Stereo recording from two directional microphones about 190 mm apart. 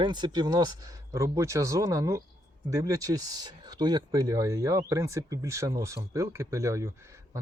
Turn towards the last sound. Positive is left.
turn(degrees=-15)  # may be behind; listen again after turning